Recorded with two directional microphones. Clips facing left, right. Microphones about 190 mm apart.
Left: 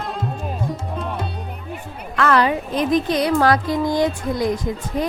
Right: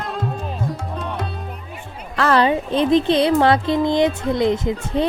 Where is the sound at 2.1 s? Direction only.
30° right (ahead or behind).